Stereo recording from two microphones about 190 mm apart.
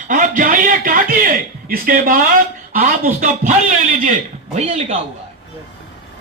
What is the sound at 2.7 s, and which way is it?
Speech, 50° right (ahead or behind).